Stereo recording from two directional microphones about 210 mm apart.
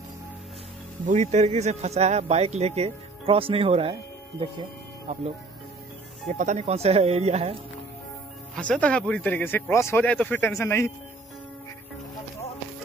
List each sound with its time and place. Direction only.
1.0 s speech: 35° right (ahead or behind)
6.3 s speech: 35° right (ahead or behind)
8.5 s speech: 5° left (ahead or behind)